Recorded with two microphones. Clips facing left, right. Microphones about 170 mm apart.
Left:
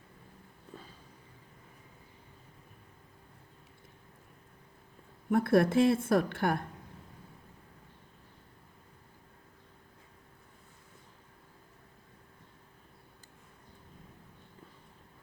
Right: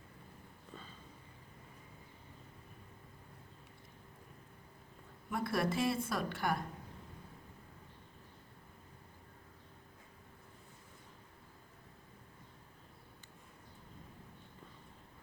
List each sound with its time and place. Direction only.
5.3 s a woman's voice: 55° left (ahead or behind)